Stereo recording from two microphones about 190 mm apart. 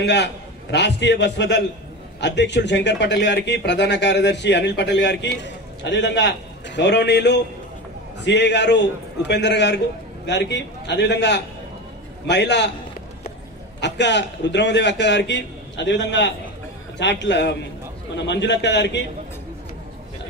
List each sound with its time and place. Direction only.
0.0 s speech: 65° left (ahead or behind)
13.7 s a man's voice: 65° left (ahead or behind)